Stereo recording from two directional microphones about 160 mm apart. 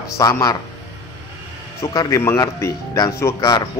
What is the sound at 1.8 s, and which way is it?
Speech, 20° left (ahead or behind).